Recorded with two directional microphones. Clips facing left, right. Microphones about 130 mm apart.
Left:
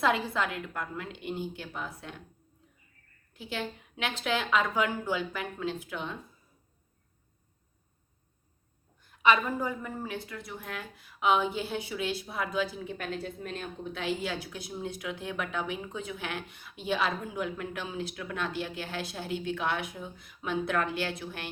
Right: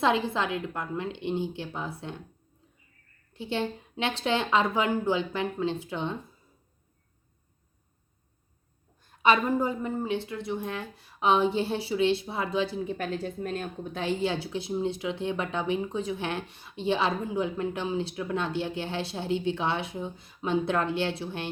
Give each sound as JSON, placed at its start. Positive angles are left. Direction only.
{"t": 0.0, "sound": "a woman's voice", "side_deg": -25}
{"t": 3.3, "sound": "a woman's voice", "side_deg": -30}
{"t": 9.0, "sound": "a woman's voice", "side_deg": -35}